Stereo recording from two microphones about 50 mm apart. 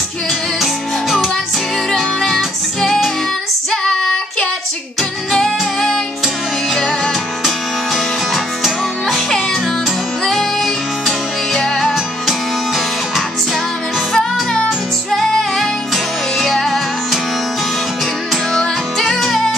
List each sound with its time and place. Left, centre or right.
1.9 s music: centre
5.3 s music: centre
9.1 s music: centre
18.6 s music: centre